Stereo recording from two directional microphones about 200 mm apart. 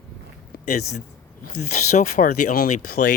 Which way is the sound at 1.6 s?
35° left (ahead or behind).